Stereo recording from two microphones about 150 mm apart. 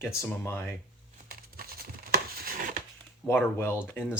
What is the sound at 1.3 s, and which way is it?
Crumpling, 85° right.